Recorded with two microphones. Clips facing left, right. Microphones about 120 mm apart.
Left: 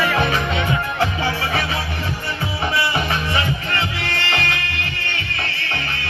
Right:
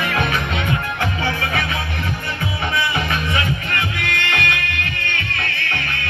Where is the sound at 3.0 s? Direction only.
30° left (ahead or behind).